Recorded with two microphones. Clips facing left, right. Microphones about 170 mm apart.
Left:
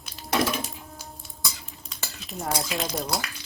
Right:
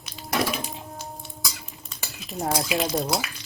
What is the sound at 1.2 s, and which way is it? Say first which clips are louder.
Stir: right 1 dB; centre (ahead or behind).